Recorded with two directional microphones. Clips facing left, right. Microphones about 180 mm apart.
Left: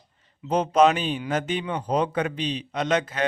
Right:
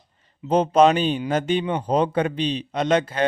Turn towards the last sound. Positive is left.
turn(degrees=-30)  # may be behind; listen again after turning